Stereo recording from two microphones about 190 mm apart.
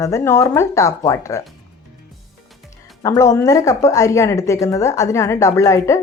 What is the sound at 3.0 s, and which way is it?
Speech, 15° left (ahead or behind).